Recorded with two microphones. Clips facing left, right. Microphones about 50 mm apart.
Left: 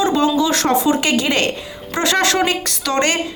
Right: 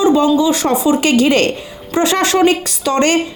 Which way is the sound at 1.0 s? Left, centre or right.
Right.